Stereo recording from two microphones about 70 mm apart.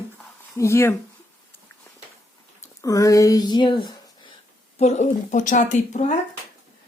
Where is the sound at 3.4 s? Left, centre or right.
Left.